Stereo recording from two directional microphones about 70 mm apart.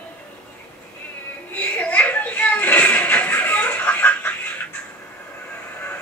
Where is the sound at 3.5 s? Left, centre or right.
Left.